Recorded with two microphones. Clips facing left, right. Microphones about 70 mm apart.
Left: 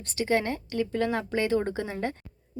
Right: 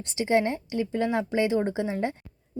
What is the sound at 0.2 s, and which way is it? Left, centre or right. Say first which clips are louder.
A woman's voice: right 3 dB; right.